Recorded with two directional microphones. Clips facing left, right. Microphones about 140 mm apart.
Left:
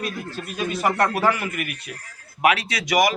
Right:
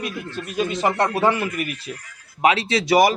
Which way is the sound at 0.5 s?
25° right (ahead or behind).